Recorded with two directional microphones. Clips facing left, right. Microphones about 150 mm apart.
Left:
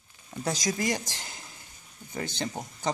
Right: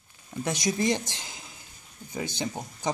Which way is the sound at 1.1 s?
20° right (ahead or behind).